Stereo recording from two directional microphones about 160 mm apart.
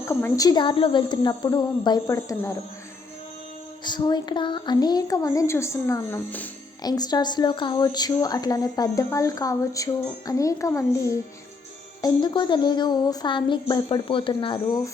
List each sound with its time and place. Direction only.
0.0 s a woman's voice: 20° left (ahead or behind)
3.8 s a woman's voice: 25° left (ahead or behind); by 6.5 s 10° left (ahead or behind)
6.8 s a woman's voice: 25° left (ahead or behind)